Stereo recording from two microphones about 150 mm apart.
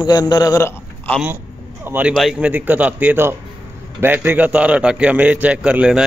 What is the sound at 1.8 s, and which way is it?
Speech, 10° right (ahead or behind).